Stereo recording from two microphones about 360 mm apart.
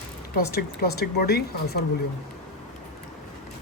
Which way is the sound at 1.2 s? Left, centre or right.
Left.